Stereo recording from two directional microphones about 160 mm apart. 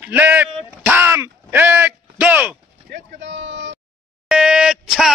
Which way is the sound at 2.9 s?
90° right.